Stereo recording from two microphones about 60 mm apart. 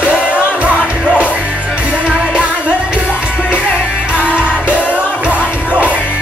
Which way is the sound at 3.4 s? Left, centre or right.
Centre.